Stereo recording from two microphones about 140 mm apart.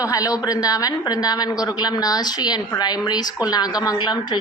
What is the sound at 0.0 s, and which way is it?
A woman's voice, 25° left (ahead or behind).